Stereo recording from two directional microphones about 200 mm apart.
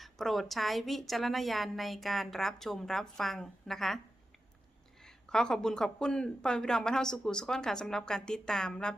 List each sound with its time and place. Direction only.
0.0 s a woman's voice: centre (ahead or behind)
5.0 s a woman's voice: 5° left (ahead or behind)